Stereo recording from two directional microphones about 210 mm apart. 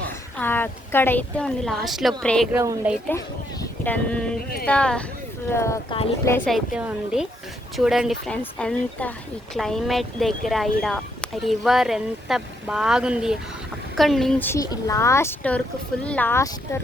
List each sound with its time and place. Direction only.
0.3 s speech: 10° left (ahead or behind)
2.5 s speech: 10° right (ahead or behind)
3.1 s a woman's voice: 10° left (ahead or behind)
6.7 s a woman's voice: 5° right (ahead or behind); by 16.8 s 15° left (ahead or behind)